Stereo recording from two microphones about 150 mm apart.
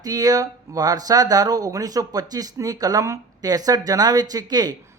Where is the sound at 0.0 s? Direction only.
25° right (ahead or behind).